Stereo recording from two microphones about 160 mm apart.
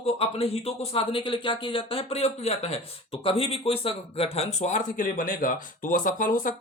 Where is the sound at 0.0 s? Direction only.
40° left (ahead or behind).